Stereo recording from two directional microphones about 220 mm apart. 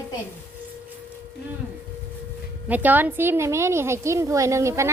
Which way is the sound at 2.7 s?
5° right (ahead or behind).